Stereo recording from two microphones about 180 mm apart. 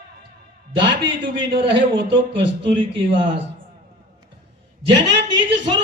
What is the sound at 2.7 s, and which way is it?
Speech, 30° right (ahead or behind).